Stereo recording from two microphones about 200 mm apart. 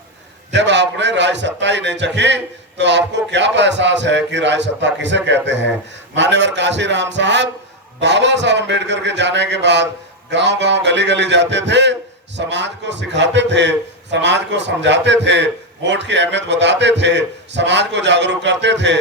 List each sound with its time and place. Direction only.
0.5 s a man's voice: 60° right (ahead or behind)